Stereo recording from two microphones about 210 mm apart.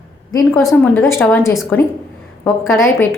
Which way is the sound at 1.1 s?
10° left (ahead or behind).